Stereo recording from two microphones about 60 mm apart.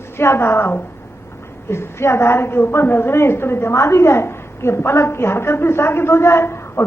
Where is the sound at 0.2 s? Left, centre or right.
Left.